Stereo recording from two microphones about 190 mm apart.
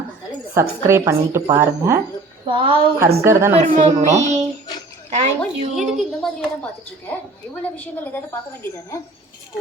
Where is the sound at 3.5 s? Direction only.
40° right (ahead or behind).